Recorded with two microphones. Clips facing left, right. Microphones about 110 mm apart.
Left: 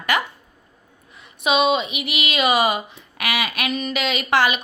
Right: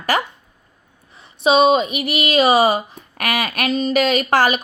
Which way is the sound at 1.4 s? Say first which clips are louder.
Right 5 dB; 35° right (ahead or behind).